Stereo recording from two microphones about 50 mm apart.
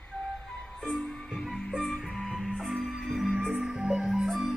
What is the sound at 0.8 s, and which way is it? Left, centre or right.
Music, centre.